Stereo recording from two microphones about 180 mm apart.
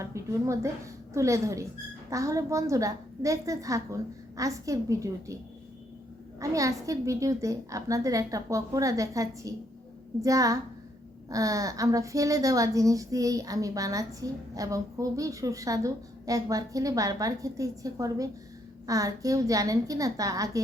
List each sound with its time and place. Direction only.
0.0 s a woman's voice: 15° right (ahead or behind)
6.4 s a woman's voice: 20° right (ahead or behind)